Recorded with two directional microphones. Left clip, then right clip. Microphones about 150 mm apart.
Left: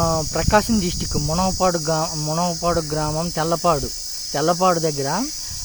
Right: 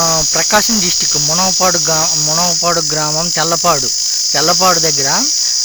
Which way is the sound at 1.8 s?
15° right (ahead or behind).